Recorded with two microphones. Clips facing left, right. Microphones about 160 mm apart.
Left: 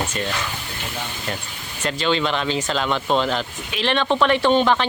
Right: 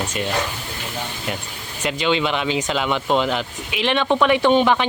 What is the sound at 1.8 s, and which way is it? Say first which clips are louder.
Speech: right 1 dB; 15° right (ahead or behind).